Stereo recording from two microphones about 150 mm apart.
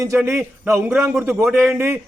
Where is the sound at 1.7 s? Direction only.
15° right (ahead or behind).